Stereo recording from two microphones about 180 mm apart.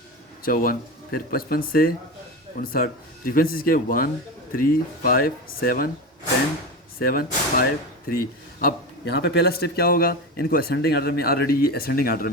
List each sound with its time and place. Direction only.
0.4 s a man's voice: 55° left (ahead or behind)
7.0 s a man's voice: 55° left (ahead or behind)